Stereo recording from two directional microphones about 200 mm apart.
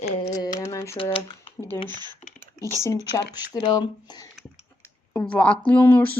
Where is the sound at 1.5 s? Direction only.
15° left (ahead or behind).